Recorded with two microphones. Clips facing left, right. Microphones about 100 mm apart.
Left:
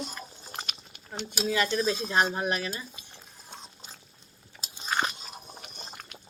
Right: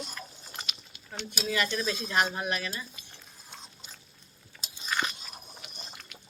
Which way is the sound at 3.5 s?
35° left (ahead or behind).